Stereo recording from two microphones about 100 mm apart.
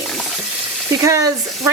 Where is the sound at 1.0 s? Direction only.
35° right (ahead or behind).